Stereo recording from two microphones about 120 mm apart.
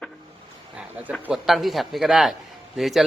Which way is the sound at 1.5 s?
Centre (ahead or behind).